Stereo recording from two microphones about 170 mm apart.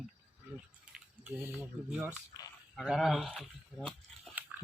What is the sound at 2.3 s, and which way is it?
Speech, 25° left (ahead or behind).